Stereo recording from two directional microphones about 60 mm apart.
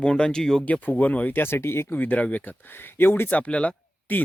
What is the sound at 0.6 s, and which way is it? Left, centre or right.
Speech, left.